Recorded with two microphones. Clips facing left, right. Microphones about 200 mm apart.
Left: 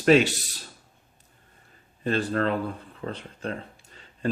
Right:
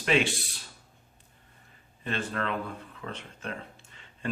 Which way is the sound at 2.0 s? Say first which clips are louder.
Left 7 dB; 35° left (ahead or behind).